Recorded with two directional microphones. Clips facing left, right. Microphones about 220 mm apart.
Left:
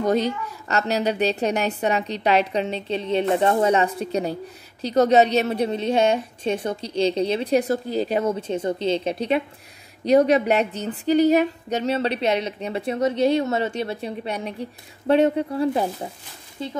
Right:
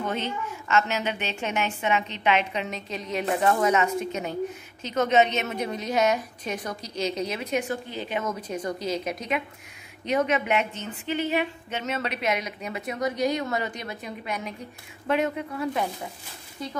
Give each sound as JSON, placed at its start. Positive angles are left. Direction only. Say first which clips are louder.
{"t": 0.0, "sound": "a woman's voice", "louder": "left 8 dB", "side_deg": 35}